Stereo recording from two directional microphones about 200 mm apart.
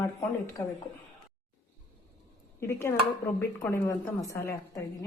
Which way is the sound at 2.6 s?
15° left (ahead or behind).